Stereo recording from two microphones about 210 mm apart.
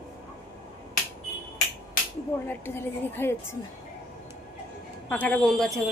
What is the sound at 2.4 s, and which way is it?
A woman's voice, 10° left (ahead or behind).